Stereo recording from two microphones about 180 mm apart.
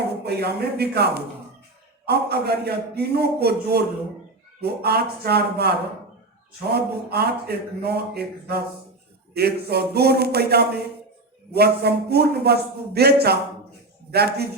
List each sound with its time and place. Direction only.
0.3 s speech: 65° right (ahead or behind)